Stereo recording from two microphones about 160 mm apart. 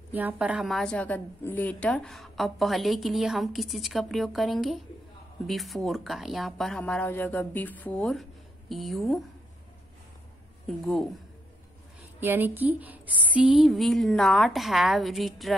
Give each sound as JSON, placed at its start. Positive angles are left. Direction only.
{"t": 0.1, "sound": "a woman's voice", "side_deg": -10}
{"t": 12.2, "sound": "a woman's voice", "side_deg": -15}